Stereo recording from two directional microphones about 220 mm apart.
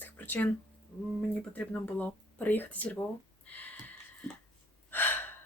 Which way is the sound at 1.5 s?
5° left (ahead or behind).